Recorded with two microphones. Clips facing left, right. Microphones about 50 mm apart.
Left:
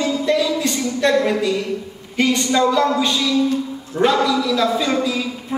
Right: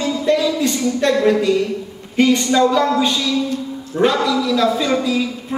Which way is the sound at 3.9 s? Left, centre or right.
Centre.